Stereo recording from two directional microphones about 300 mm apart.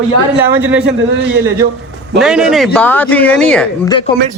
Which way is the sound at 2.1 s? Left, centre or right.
Centre.